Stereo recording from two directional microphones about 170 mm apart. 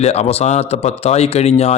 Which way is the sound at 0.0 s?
40° left (ahead or behind).